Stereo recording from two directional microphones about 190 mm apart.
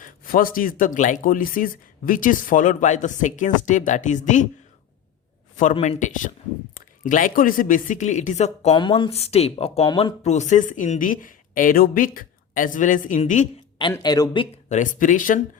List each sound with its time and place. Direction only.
0.0 s speech: 45° left (ahead or behind)
5.7 s speech: 35° left (ahead or behind)
8.7 s speech: 25° left (ahead or behind)
9.8 s speech: 20° left (ahead or behind)
10.2 s speech: 40° left (ahead or behind)
13.9 s speech: 20° left (ahead or behind)
14.7 s speech: 40° left (ahead or behind)